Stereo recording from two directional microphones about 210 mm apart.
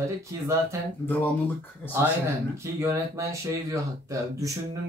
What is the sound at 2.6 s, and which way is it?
Speech, 15° right (ahead or behind).